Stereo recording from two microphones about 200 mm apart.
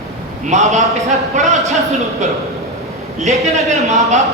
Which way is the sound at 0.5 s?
35° right (ahead or behind).